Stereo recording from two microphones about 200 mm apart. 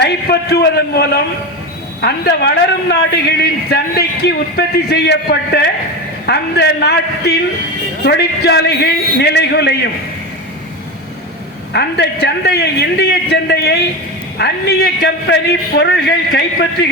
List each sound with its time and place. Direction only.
0.0 s a man's voice: 55° left (ahead or behind)
11.7 s a man's voice: 55° left (ahead or behind)